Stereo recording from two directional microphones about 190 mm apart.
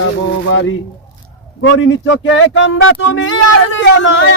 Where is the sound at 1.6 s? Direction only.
85° left.